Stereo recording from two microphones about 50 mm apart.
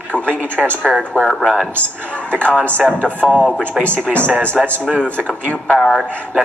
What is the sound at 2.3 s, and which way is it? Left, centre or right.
Speech, left.